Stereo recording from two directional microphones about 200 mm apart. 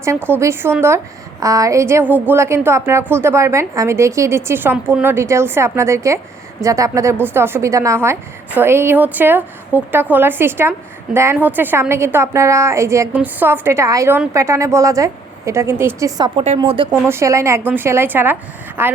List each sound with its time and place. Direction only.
0.0 s a woman's voice: 10° right (ahead or behind)
17.1 s a woman's voice: 15° right (ahead or behind)